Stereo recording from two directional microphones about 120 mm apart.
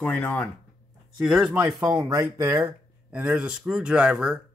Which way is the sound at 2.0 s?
30° right (ahead or behind).